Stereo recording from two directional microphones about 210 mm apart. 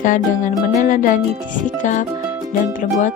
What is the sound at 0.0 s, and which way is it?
Music, 40° left (ahead or behind).